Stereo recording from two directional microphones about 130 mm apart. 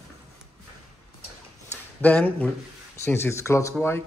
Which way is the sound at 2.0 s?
15° left (ahead or behind).